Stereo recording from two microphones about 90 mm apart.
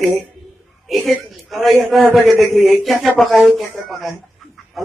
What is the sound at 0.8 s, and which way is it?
A woman's voice, centre (ahead or behind).